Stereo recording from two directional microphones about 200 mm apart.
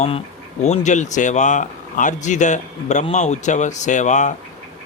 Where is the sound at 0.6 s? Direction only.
35° left (ahead or behind).